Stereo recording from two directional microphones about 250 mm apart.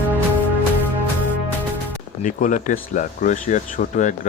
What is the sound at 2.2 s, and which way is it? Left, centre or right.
Speech, left.